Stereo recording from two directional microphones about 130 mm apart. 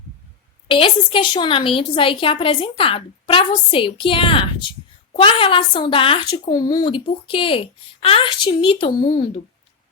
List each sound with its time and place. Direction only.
0.7 s a woman's voice: 40° left (ahead or behind)
6.3 s a woman's voice: 30° left (ahead or behind)